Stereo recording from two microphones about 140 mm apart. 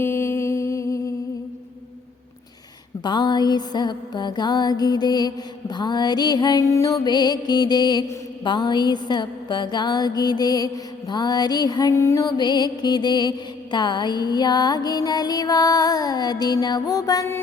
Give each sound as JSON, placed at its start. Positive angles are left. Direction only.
{"t": 0.0, "sound": "music", "side_deg": 20}
{"t": 3.0, "sound": "music", "side_deg": 30}